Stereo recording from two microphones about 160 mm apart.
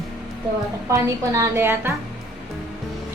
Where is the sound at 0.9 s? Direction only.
20° right (ahead or behind).